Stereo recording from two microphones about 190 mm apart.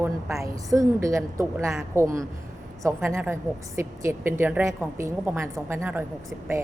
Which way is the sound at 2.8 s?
15° right (ahead or behind).